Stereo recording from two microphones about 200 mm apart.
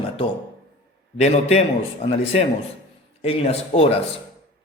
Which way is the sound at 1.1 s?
35° left (ahead or behind).